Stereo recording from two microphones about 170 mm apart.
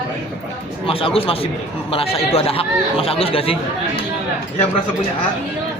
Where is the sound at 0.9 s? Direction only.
35° left (ahead or behind).